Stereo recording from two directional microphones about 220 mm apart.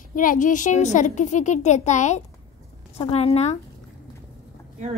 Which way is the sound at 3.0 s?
25° left (ahead or behind).